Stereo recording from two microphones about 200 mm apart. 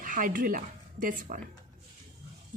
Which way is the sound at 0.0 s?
40° right (ahead or behind).